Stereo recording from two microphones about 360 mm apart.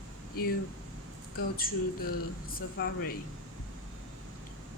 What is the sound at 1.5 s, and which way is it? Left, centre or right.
A woman's voice, left.